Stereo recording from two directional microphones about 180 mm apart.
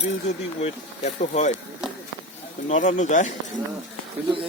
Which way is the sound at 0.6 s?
40° left (ahead or behind).